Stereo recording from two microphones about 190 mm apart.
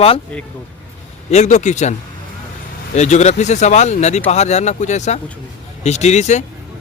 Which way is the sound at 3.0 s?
35° left (ahead or behind).